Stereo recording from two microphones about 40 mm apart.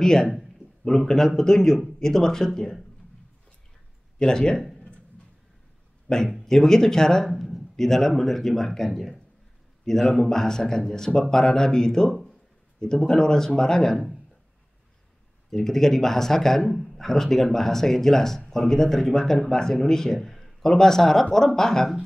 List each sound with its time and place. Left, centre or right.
0.0 s speech: centre
4.2 s speech: centre
6.0 s speech: centre
7.2 s a sound: centre
7.7 s speech: centre
15.5 s speech: centre